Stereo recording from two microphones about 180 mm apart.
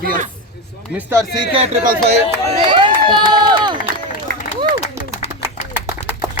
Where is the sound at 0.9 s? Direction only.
15° right (ahead or behind).